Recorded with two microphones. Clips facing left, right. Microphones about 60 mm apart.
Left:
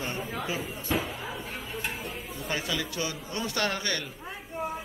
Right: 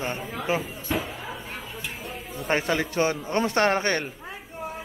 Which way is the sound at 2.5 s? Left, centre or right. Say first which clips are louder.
Right 8 dB; right.